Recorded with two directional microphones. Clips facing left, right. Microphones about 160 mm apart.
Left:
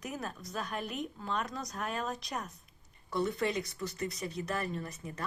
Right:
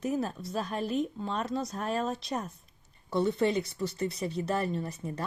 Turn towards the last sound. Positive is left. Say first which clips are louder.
# right 5 dB
turn(degrees=-30)  # may be behind; listen again after turning